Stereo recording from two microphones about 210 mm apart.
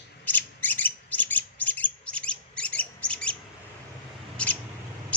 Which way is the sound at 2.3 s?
5° left (ahead or behind).